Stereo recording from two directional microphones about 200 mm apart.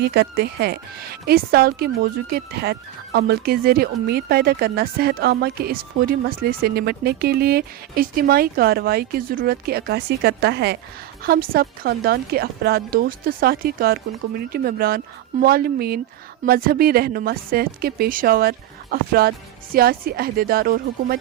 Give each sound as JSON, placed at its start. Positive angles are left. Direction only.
{"t": 0.0, "sound": "speech", "side_deg": -55}